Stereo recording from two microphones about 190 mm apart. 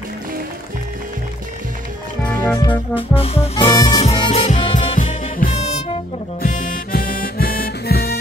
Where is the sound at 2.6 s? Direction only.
25° left (ahead or behind).